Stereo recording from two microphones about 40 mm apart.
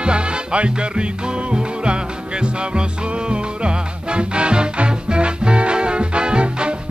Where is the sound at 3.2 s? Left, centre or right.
Right.